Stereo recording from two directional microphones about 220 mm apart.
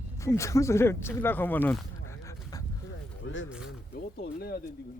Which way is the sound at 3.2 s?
60° left (ahead or behind).